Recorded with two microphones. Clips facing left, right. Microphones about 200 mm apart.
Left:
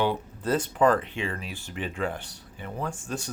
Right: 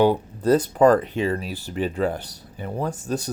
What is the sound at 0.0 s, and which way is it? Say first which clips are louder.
Speech: right 8 dB; 40° right (ahead or behind).